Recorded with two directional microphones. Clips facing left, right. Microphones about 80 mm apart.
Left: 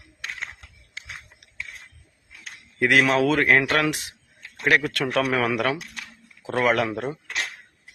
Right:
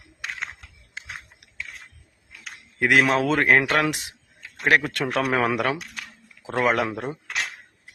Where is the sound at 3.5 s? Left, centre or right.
Centre; by 5.5 s right.